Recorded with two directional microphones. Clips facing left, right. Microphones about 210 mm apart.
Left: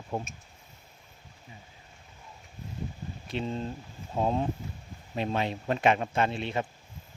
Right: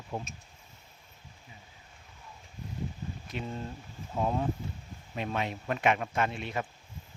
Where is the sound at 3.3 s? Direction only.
25° left (ahead or behind).